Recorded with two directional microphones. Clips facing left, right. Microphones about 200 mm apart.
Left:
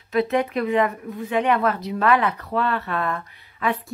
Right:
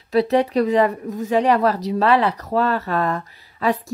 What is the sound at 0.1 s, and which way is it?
Speech, 35° right (ahead or behind).